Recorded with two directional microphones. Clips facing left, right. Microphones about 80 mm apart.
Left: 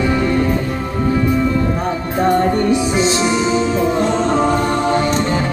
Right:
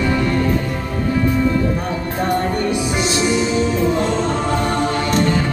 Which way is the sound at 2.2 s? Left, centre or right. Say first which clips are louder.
Left 5 dB; left.